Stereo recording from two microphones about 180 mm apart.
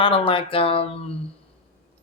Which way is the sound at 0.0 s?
30° left (ahead or behind).